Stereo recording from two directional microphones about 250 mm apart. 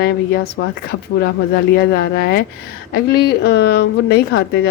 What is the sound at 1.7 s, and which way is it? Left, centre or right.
A woman's voice, left.